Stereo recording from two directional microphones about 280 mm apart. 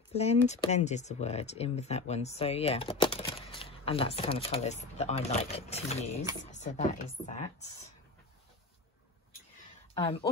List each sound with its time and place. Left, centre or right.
0.1 s speech: left
9.9 s speech: centre